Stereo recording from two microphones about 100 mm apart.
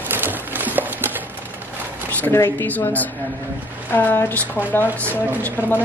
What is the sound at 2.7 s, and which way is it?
Speech, 15° left (ahead or behind).